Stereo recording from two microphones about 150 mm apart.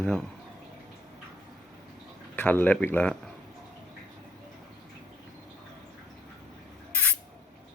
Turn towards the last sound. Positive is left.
turn(degrees=10)  # may be behind; listen again after turning